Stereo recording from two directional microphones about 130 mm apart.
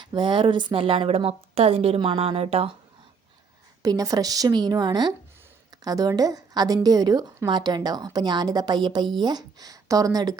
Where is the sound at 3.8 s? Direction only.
25° right (ahead or behind).